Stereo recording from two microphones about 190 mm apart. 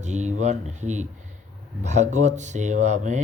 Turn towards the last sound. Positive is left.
turn(degrees=-40)  # may be behind; listen again after turning